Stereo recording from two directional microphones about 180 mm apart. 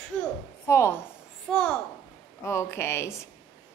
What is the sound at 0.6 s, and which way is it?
Speech, 15° left (ahead or behind).